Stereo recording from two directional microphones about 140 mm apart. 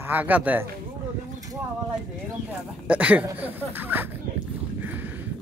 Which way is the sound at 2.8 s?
10° right (ahead or behind).